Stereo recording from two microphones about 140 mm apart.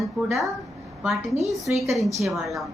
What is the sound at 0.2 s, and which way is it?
Speech, 5° right (ahead or behind).